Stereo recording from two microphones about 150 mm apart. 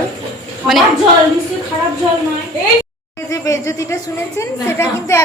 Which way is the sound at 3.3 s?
20° left (ahead or behind).